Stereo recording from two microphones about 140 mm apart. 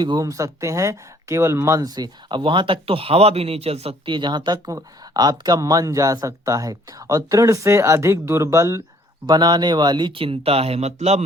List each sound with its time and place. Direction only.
0.0 s speech: 30° right (ahead or behind); by 11.2 s 50° right (ahead or behind)